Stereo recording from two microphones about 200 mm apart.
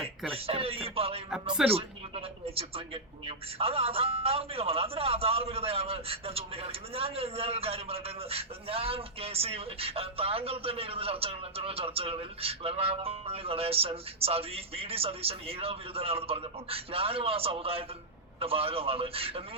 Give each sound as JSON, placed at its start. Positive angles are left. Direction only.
{"t": 0.3, "sound": "a man's voice", "side_deg": -30}